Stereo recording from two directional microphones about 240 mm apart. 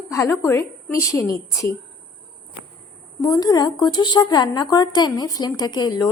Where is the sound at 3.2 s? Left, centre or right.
Centre.